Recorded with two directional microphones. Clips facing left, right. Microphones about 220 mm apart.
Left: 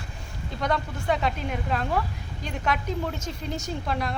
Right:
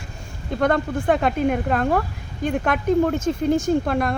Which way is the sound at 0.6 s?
50° right (ahead or behind).